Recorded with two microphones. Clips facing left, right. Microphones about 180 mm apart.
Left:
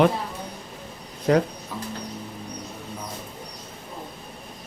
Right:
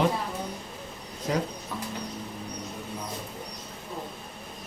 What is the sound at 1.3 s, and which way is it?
Speech, 60° left (ahead or behind).